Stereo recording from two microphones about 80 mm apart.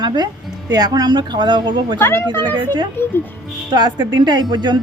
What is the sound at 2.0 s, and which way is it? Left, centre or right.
Speech, left.